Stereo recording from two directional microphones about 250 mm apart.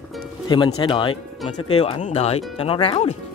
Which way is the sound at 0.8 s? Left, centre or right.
Centre.